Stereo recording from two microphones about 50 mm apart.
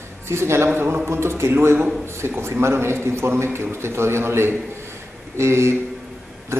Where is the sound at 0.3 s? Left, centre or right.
Right.